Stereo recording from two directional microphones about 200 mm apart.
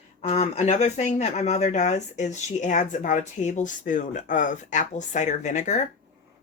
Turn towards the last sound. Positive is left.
turn(degrees=35)  # may be behind; listen again after turning